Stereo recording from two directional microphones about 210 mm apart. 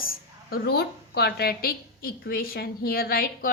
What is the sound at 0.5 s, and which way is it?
A woman's voice, 50° left (ahead or behind).